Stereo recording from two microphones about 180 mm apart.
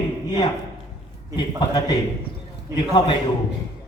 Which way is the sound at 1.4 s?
25° left (ahead or behind).